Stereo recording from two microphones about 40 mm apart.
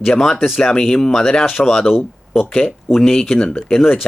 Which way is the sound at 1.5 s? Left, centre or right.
Centre.